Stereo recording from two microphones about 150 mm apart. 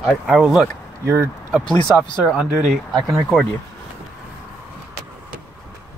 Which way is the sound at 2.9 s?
25° right (ahead or behind).